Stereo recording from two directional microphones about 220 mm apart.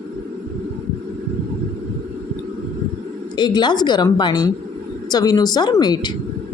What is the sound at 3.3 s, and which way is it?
A woman's voice, 20° left (ahead or behind).